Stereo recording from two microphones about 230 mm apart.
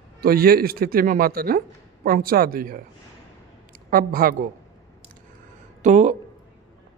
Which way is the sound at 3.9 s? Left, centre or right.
Right.